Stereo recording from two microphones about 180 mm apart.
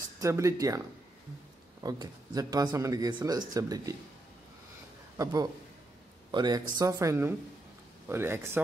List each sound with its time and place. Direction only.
0.2 s speech: 15° right (ahead or behind)
5.1 s a man's voice: 20° right (ahead or behind)